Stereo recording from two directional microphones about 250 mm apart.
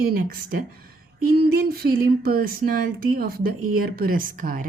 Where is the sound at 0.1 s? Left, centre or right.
Right.